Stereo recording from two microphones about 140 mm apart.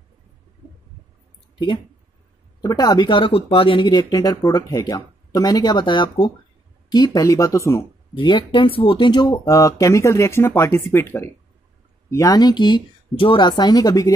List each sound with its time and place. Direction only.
2.6 s speech: 30° left (ahead or behind)
8.2 s speech: 35° left (ahead or behind)